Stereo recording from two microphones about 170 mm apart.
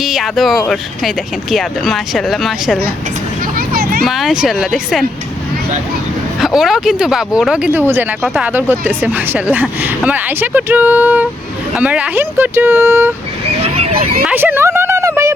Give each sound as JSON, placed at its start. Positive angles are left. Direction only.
{"t": 0.0, "sound": "speech", "side_deg": 0}
{"t": 3.7, "sound": "vehicle", "side_deg": -60}
{"t": 4.0, "sound": "speech", "side_deg": 0}
{"t": 6.4, "sound": "speech", "side_deg": 0}
{"t": 13.6, "sound": "vehicle", "side_deg": -35}
{"t": 14.3, "sound": "a sound", "side_deg": -10}